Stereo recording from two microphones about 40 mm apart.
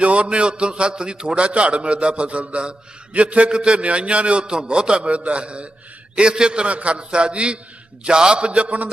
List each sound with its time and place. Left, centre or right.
0.0 s a man's voice: right